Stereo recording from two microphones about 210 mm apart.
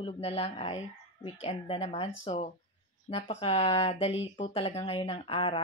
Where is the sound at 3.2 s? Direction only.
30° left (ahead or behind).